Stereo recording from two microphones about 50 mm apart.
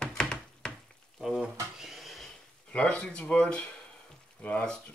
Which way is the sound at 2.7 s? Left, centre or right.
Left.